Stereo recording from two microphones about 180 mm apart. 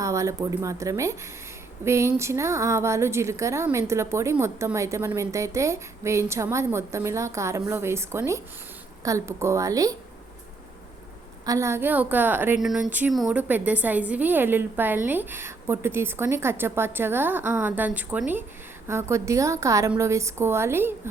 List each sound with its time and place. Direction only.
0.0 s a woman's voice: 15° right (ahead or behind)
11.4 s a woman's voice: 15° right (ahead or behind)